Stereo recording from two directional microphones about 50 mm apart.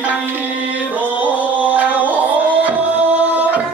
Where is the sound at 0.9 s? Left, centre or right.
Right.